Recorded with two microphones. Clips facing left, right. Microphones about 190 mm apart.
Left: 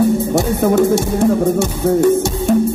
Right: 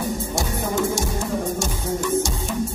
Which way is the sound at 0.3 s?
60° left (ahead or behind).